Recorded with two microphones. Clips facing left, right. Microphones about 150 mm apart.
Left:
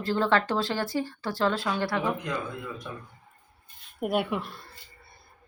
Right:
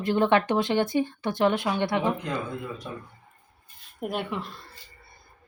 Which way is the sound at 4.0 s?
5° left (ahead or behind).